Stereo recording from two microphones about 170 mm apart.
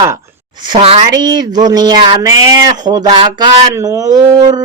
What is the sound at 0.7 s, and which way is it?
Speech, 35° right (ahead or behind).